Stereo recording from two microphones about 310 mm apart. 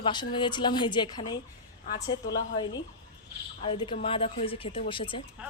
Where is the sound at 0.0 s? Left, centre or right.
Centre.